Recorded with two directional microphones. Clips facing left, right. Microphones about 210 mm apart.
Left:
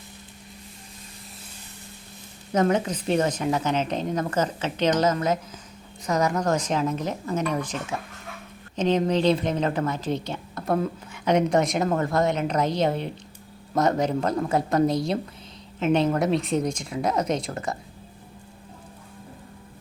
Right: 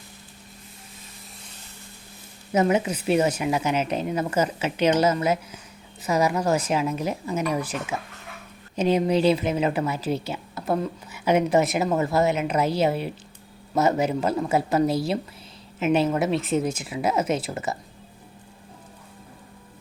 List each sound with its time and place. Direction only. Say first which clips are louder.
2.5 s a woman's voice: right 1 dB; 10° right (ahead or behind)